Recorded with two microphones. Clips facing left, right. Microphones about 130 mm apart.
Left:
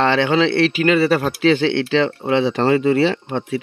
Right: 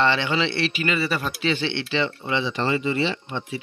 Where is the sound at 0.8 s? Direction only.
75° left (ahead or behind).